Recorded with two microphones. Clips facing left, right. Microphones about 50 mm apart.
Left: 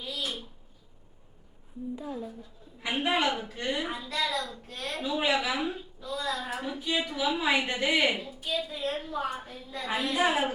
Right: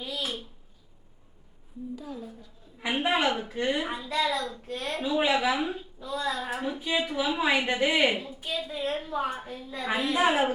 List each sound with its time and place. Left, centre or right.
0.0 s a sound: centre
2.0 s a woman's voice: left
2.8 s a woman's voice: centre